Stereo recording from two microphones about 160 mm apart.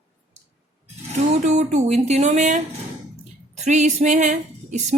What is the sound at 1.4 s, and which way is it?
Speech, 45° right (ahead or behind).